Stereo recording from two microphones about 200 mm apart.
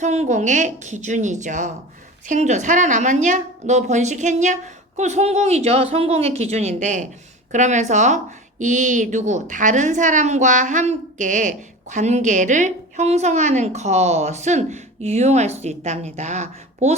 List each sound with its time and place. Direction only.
0.0 s a woman's voice: 35° right (ahead or behind)